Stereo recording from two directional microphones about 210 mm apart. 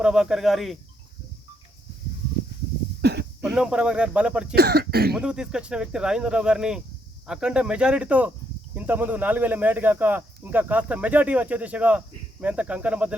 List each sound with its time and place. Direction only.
0.0 s speech: 5° right (ahead or behind)
3.0 s speech: 50° right (ahead or behind)
3.4 s speech: 5° right (ahead or behind)
4.5 s speech: 45° right (ahead or behind)
5.1 s speech: 5° right (ahead or behind)